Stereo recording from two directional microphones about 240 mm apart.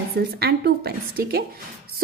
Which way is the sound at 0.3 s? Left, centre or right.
Right.